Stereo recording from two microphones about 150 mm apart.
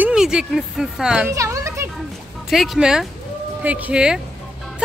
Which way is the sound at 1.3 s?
20° right (ahead or behind).